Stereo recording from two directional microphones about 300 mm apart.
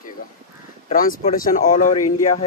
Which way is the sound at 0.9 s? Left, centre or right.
Left.